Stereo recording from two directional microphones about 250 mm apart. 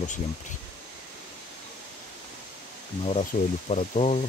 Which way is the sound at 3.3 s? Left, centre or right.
Left.